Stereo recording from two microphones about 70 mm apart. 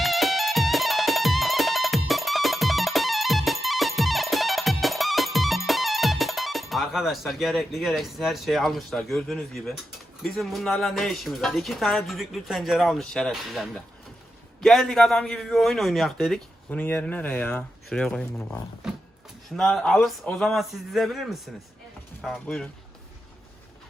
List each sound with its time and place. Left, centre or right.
0.0 s music: centre
10.2 s speech: centre
16.6 s speech: left
17.9 s speech: centre
18.8 s a sound: centre
19.5 s speech: centre
22.3 s speech: centre